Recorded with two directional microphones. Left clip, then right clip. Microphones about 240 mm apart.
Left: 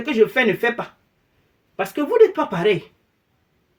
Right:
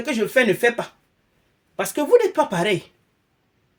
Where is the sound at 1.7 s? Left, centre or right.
Right.